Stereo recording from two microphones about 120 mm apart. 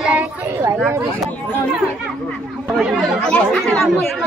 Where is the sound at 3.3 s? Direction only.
5° left (ahead or behind).